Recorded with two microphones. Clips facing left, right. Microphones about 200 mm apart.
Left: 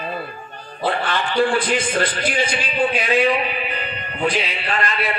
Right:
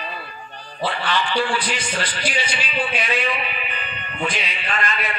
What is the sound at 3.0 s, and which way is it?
Music, 35° left (ahead or behind).